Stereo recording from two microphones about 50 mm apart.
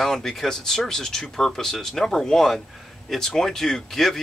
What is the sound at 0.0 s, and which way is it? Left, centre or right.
Speech, centre.